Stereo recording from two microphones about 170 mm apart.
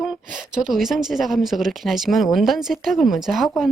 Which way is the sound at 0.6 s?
Centre (ahead or behind).